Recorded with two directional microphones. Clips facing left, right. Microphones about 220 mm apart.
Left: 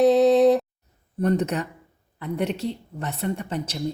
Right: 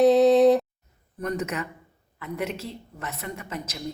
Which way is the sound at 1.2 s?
35° left (ahead or behind).